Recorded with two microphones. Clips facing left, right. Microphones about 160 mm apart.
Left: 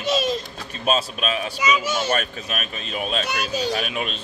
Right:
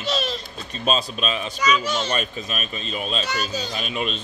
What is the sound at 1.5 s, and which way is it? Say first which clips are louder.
Speech: right 2 dB; 10° left (ahead or behind).